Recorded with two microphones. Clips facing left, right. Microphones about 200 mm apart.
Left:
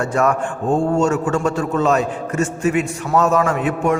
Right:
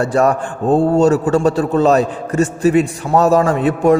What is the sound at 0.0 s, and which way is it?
A man's voice, 35° right (ahead or behind).